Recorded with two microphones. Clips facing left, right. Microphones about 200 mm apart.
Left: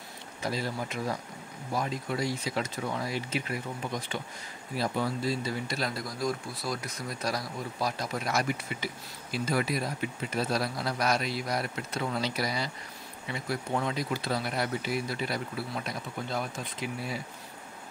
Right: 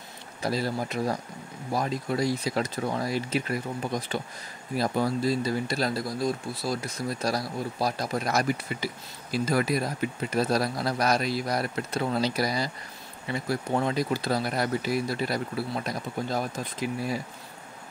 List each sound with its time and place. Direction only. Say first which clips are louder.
0.4 s speech: right 4 dB; 40° right (ahead or behind)
4.7 s speech: right 4 dB; 40° right (ahead or behind)